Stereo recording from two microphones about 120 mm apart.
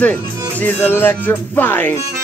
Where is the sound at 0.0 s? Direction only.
15° left (ahead or behind).